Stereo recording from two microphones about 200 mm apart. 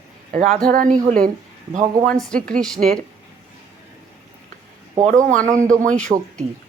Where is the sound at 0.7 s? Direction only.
45° right (ahead or behind).